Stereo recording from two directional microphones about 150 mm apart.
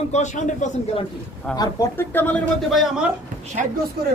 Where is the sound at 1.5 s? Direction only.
25° left (ahead or behind).